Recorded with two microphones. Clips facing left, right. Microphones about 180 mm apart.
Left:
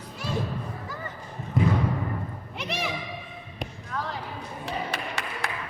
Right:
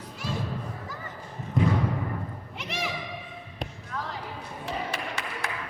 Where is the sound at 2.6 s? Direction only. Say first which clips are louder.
Left 3 dB; 70° left (ahead or behind).